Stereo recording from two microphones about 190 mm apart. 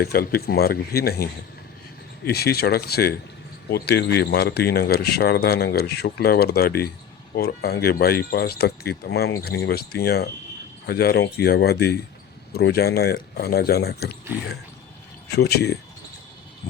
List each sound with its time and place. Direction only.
0.0 s speech: 55° left (ahead or behind)
15.4 s speech: 60° left (ahead or behind)